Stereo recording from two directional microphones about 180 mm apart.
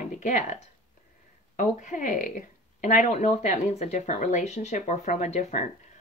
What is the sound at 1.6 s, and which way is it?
Speech, 45° left (ahead or behind).